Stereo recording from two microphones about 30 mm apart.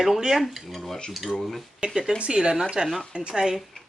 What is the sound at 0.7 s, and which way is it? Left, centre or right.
Dishes, centre.